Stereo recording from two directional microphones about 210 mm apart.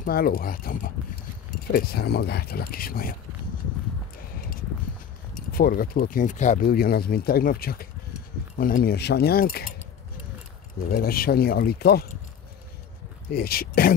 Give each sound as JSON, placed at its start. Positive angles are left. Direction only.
{"t": 0.0, "sound": "speech", "side_deg": 45}
{"t": 4.4, "sound": "a sound", "side_deg": 45}
{"t": 5.3, "sound": "speech", "side_deg": 45}
{"t": 10.9, "sound": "speech", "side_deg": 45}
{"t": 13.3, "sound": "speech", "side_deg": 45}